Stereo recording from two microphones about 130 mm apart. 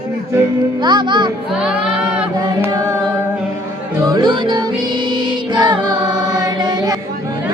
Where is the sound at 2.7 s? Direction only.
30° right (ahead or behind).